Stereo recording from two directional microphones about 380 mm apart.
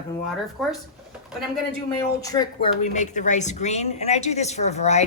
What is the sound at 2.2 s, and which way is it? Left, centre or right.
A woman's voice, centre.